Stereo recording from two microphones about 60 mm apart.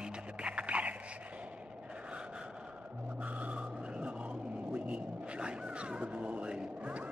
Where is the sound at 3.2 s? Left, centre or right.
Right.